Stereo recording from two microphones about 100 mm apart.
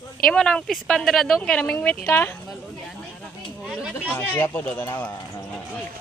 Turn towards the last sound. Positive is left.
turn(degrees=20)  # may be behind; listen again after turning